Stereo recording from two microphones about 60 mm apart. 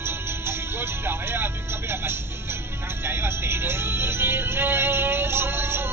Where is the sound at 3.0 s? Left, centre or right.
Right.